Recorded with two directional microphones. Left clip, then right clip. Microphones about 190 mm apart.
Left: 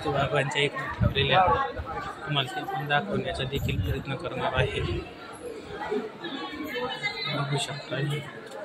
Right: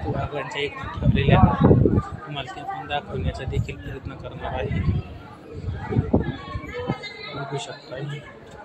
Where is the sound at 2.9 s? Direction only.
30° right (ahead or behind).